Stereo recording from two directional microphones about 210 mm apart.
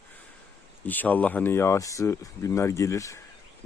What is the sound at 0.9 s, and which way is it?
Speech, 10° left (ahead or behind).